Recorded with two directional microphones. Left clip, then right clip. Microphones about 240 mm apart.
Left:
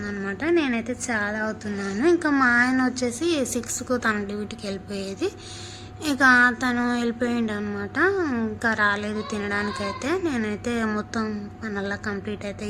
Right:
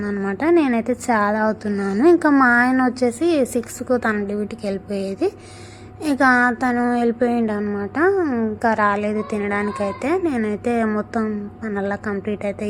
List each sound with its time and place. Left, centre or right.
0.0 s speech: centre
0.3 s speech: centre